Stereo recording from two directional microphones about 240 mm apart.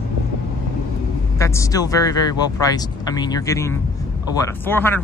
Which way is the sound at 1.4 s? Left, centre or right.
Centre.